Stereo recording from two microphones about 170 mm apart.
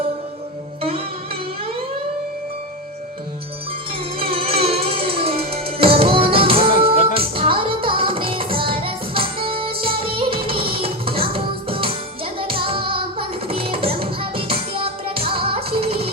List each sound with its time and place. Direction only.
0.8 s music: 35° right (ahead or behind)
4.2 s music: 35° right (ahead or behind)